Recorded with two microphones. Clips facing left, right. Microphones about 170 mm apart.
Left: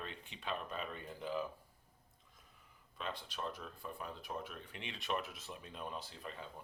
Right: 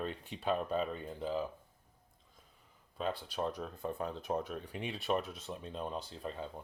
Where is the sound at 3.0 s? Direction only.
40° right (ahead or behind).